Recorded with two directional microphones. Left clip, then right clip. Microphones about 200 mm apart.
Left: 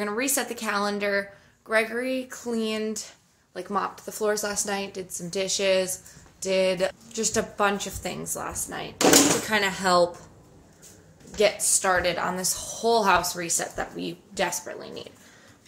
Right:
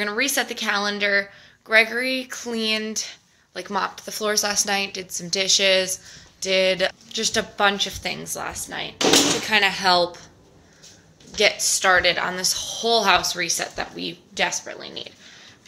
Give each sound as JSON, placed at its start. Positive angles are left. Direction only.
{"t": 0.0, "sound": "speech", "side_deg": 0}
{"t": 11.6, "sound": "speech", "side_deg": 5}